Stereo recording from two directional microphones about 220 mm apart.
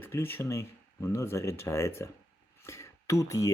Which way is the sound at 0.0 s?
10° left (ahead or behind).